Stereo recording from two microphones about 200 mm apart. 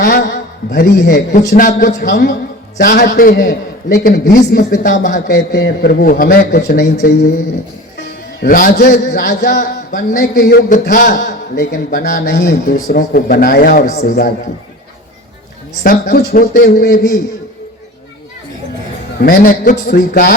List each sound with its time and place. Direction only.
0.0 s a man's voice: 45° left (ahead or behind)
1.0 s a man's voice: 45° left (ahead or behind)
5.3 s a man's voice: 55° left (ahead or behind)
13.0 s a man's voice: 45° left (ahead or behind)
15.8 s a man's voice: 45° left (ahead or behind)
19.2 s a man's voice: 45° left (ahead or behind)